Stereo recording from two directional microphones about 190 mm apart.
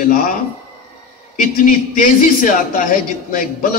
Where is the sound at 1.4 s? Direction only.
45° left (ahead or behind).